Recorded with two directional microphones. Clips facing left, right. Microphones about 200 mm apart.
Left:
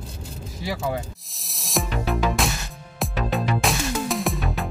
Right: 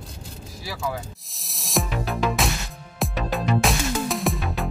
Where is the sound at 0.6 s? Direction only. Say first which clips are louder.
Left 4 dB; 20° left (ahead or behind).